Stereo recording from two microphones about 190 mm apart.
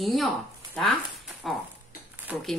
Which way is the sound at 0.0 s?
Centre (ahead or behind).